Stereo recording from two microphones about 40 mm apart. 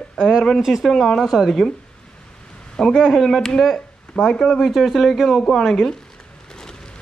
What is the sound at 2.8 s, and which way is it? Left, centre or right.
Speech, centre.